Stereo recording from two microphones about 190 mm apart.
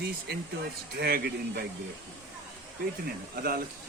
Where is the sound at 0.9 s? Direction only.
55° right (ahead or behind).